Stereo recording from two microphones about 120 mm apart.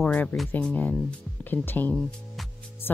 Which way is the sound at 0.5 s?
15° left (ahead or behind).